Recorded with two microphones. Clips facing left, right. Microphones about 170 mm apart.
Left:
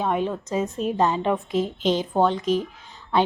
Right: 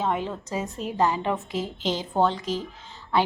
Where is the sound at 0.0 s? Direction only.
15° left (ahead or behind).